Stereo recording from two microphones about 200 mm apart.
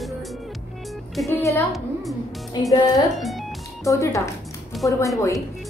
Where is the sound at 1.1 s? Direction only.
Centre (ahead or behind).